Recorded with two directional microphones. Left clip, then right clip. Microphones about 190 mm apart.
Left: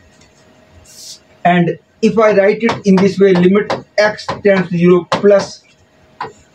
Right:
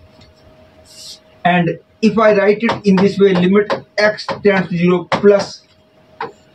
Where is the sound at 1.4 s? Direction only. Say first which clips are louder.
Left 2 dB; 5° left (ahead or behind).